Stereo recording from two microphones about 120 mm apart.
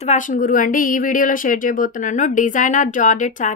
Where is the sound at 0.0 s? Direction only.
90° left.